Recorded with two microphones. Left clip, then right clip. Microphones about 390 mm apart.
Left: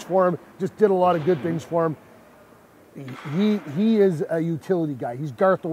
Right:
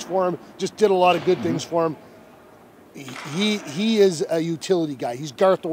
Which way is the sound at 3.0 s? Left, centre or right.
Left.